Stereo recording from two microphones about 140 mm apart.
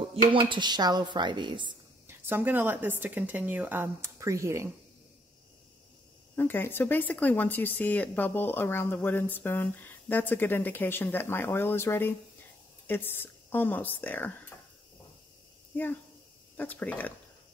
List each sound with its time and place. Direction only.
0.1 s speech: 35° right (ahead or behind)
2.0 s a woman's voice: 15° right (ahead or behind)
6.3 s speech: 15° left (ahead or behind)
15.7 s speech: 10° left (ahead or behind)